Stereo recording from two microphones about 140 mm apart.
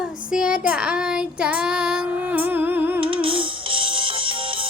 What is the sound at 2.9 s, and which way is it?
Music, 40° right (ahead or behind).